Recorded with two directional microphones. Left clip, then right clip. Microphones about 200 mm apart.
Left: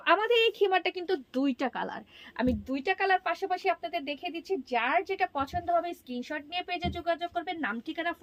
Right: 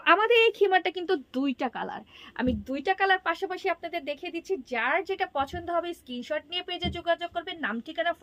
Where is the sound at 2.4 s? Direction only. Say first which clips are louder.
Right 1 dB; 25° right (ahead or behind).